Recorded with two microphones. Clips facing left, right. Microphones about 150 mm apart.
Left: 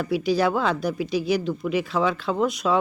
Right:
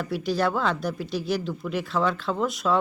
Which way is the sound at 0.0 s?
Centre (ahead or behind).